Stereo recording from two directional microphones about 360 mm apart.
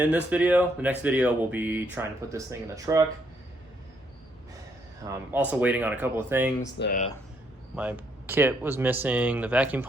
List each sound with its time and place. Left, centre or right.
0.0 s speech: centre
5.0 s speech: centre
6.6 s speech: left
7.8 s speech: centre